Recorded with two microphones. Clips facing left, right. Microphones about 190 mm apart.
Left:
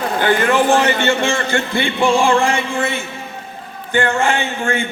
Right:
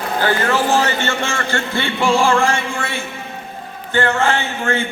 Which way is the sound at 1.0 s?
15° left (ahead or behind).